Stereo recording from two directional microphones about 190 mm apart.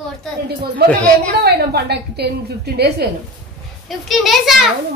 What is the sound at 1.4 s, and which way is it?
A woman's voice, 60° right (ahead or behind).